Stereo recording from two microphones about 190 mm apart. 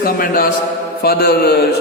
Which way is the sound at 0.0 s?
50° left (ahead or behind).